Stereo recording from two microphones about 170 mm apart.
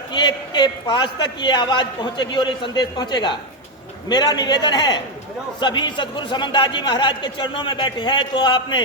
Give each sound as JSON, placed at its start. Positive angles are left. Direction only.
{"t": 0.1, "sound": "a man's voice", "side_deg": 25}